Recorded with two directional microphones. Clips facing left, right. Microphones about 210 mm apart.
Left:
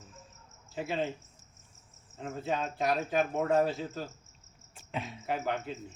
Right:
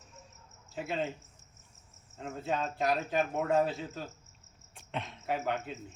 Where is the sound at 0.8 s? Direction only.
Centre (ahead or behind).